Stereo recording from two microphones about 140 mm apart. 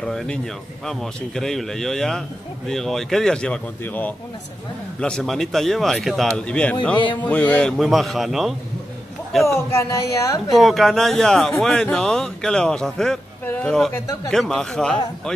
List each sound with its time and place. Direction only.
0.0 s a man's voice: 5° left (ahead or behind)
7.0 s music: 35° left (ahead or behind)
7.2 s speech: 10° left (ahead or behind)
7.7 s a man's voice: centre (ahead or behind)
9.7 s speech: 20° left (ahead or behind)
10.5 s a man's voice: centre (ahead or behind)
13.9 s speech: 25° left (ahead or behind)
14.3 s a man's voice: 5° left (ahead or behind)